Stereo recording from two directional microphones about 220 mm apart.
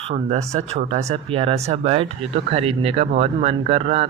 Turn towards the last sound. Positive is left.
turn(degrees=-30)  # may be behind; listen again after turning